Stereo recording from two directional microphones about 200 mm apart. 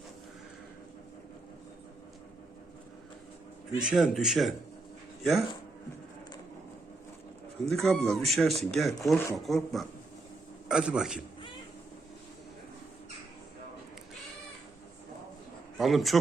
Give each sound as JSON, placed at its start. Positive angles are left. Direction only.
{"t": 3.8, "sound": "speech", "side_deg": 0}
{"t": 7.7, "sound": "speech", "side_deg": 0}
{"t": 15.8, "sound": "speech", "side_deg": 0}